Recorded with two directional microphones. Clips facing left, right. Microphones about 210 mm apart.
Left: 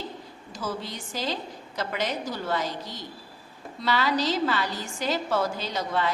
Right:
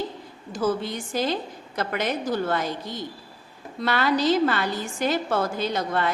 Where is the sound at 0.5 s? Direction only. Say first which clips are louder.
Right 8 dB; 55° right (ahead or behind).